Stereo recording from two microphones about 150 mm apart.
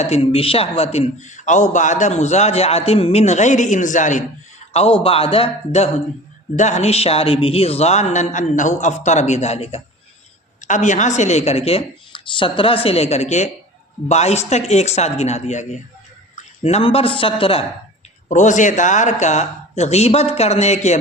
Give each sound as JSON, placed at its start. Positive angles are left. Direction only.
{"t": 0.0, "sound": "a man's voice", "side_deg": 40}
{"t": 4.7, "sound": "a man's voice", "side_deg": 40}
{"t": 10.6, "sound": "a man's voice", "side_deg": 55}
{"t": 18.3, "sound": "a man's voice", "side_deg": 55}